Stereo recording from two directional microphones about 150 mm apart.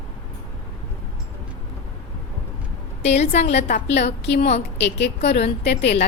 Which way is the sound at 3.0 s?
45° left (ahead or behind).